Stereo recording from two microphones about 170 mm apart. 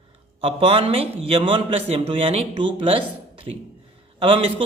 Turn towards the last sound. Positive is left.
turn(degrees=-30)  # may be behind; listen again after turning